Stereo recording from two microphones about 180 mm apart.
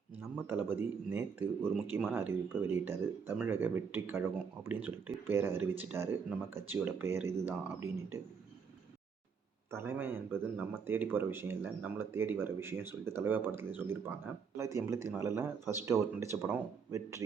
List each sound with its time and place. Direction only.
0.4 s speech: 10° right (ahead or behind)
9.7 s speech: 15° right (ahead or behind)